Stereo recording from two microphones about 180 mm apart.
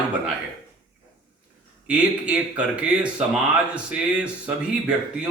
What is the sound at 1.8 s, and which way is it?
Speech, 5° right (ahead or behind).